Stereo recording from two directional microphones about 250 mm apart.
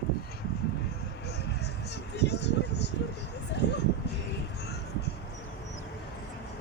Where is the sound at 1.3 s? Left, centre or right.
Left.